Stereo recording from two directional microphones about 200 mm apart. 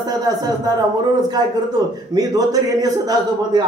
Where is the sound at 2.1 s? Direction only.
20° right (ahead or behind).